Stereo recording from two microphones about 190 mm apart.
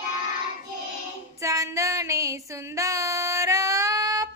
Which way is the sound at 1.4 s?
15° right (ahead or behind).